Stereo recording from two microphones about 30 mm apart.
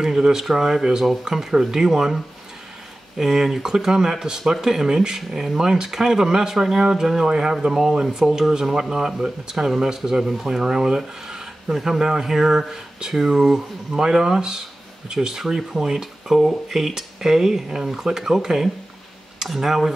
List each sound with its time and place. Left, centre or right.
0.0 s speech: centre